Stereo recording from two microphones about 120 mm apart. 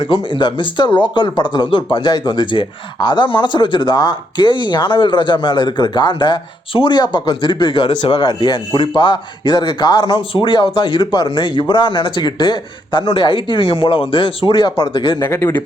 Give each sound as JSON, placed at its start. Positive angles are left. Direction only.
{"t": 0.0, "sound": "speech", "side_deg": 45}
{"t": 15.2, "sound": "speech", "side_deg": 20}